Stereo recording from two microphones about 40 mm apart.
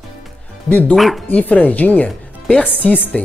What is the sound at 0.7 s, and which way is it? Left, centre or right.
Speech, left.